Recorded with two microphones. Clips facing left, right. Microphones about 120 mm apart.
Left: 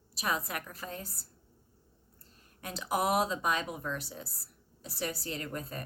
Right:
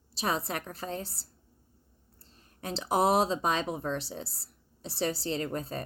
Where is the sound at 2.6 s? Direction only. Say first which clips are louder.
Right 5 dB; 30° right (ahead or behind).